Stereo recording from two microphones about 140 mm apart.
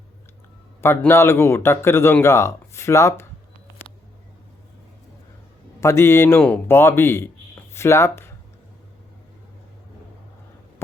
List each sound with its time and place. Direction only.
0.8 s a man's voice: 15° left (ahead or behind)
5.8 s a man's voice: 20° left (ahead or behind)